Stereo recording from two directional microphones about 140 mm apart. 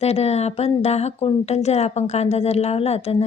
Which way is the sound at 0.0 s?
50° left (ahead or behind).